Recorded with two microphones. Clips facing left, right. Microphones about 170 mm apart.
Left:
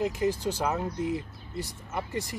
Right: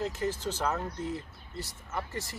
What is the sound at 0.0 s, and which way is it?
Speech, 15° left (ahead or behind).